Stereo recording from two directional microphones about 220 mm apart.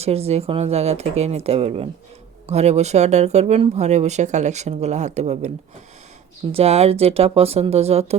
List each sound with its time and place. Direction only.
0.0 s speech: 30° right (ahead or behind)
6.5 s speech: 25° right (ahead or behind)